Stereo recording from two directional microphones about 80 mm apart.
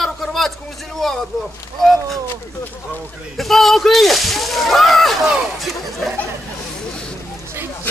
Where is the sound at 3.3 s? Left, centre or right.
Centre.